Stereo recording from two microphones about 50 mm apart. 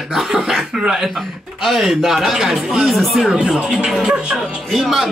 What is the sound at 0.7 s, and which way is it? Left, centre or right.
Speech, centre.